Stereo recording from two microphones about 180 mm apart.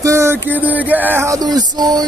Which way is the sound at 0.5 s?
10° right (ahead or behind).